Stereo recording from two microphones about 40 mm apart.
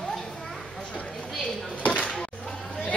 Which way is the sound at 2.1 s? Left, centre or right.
Centre.